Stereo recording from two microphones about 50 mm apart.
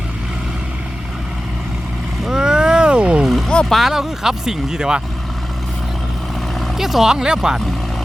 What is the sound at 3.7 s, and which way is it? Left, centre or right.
Speech, centre.